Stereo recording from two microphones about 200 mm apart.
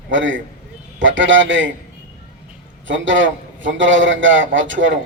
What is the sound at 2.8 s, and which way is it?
A man's voice, 70° right (ahead or behind).